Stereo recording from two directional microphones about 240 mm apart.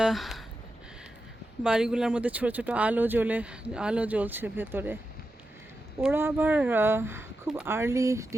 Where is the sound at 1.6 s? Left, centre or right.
Centre.